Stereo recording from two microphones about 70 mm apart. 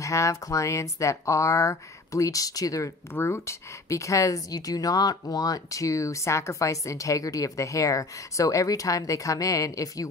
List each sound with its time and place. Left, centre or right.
0.0 s a woman's voice: left
3.2 s a woman's voice: left